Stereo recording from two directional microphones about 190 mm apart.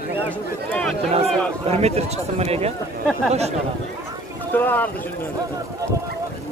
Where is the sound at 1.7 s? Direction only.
35° right (ahead or behind).